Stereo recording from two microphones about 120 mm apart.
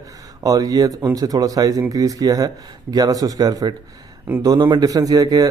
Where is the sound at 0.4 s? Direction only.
30° right (ahead or behind).